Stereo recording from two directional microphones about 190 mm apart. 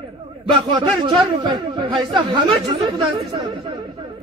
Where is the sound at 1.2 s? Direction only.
25° right (ahead or behind).